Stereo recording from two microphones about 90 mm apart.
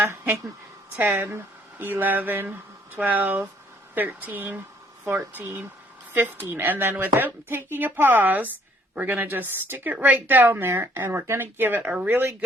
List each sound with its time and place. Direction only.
0.0 s a woman's voice: 30° right (ahead or behind)